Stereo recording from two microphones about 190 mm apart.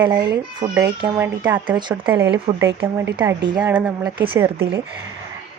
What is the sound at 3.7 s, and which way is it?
Speech, 5° right (ahead or behind).